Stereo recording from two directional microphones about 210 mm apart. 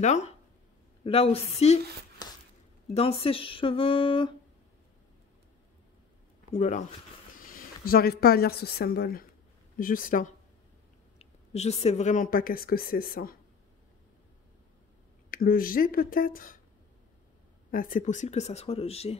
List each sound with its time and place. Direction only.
0.0 s speech: 35° left (ahead or behind)
2.2 s a sound: 20° left (ahead or behind)
2.9 s speech: 30° left (ahead or behind)
6.5 s speech: 30° left (ahead or behind)
7.4 s a woman's voice: 45° left (ahead or behind)
15.3 s speech: 45° left (ahead or behind)
17.6 s speech: 40° left (ahead or behind)